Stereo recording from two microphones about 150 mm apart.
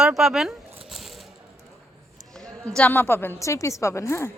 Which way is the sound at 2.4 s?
5° left (ahead or behind).